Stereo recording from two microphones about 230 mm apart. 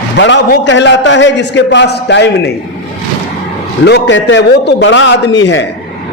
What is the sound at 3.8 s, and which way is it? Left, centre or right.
A man's voice, left.